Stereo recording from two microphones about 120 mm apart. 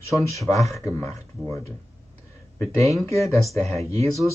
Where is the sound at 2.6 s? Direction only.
25° left (ahead or behind).